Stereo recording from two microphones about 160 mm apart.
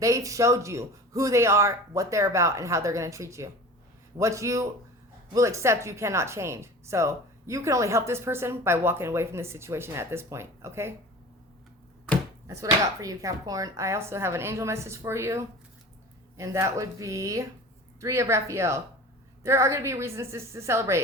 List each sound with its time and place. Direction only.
0.0 s a man's voice: 20° right (ahead or behind)
12.5 s a man's voice: 20° right (ahead or behind)